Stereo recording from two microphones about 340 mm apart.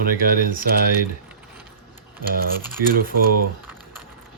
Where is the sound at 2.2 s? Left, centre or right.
Right.